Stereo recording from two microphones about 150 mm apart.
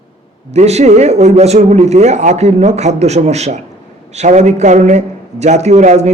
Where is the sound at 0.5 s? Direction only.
45° right (ahead or behind).